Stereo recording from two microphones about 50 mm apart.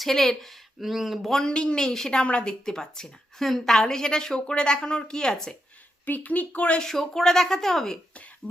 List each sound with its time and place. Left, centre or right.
0.0 s speech: centre
1.4 s speech: centre
6.1 s speech: left
6.8 s speech: centre